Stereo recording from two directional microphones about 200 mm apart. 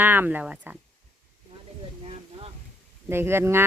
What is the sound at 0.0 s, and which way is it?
Speech, 10° right (ahead or behind).